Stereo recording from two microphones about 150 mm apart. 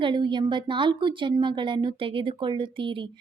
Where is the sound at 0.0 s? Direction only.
30° right (ahead or behind).